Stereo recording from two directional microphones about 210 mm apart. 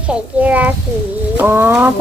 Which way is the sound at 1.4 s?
10° right (ahead or behind).